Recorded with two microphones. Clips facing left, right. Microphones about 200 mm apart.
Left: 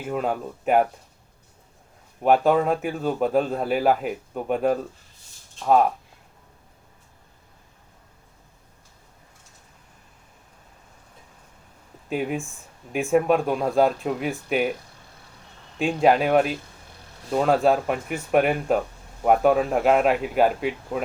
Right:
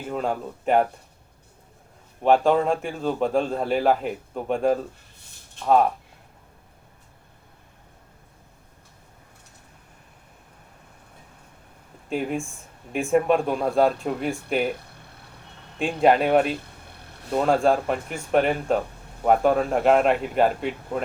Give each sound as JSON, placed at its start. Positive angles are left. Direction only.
{"t": 0.0, "sound": "a man's voice", "side_deg": 5}
{"t": 2.2, "sound": "a man's voice", "side_deg": 5}
{"t": 12.0, "sound": "a man's voice", "side_deg": 0}
{"t": 14.8, "sound": "a sound", "side_deg": -60}
{"t": 15.8, "sound": "a man's voice", "side_deg": 0}
{"t": 16.8, "sound": "vehicle", "side_deg": -60}
{"t": 17.3, "sound": "a man's voice", "side_deg": 5}